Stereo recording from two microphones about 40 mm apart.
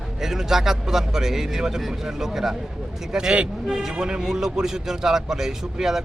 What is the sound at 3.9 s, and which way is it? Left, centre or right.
A man's voice, right.